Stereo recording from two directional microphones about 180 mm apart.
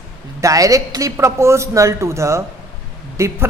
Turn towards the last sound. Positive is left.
turn(degrees=-15)  # may be behind; listen again after turning